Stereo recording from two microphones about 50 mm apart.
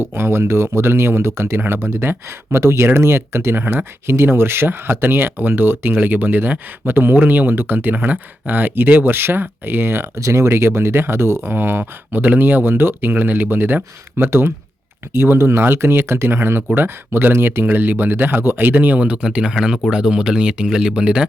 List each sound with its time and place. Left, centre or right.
0.0 s speech: right
1.5 s speech: right
3.6 s speech: right
4.0 s speech: right
10.2 s speech: right
18.7 s speech: right
19.1 s speech: centre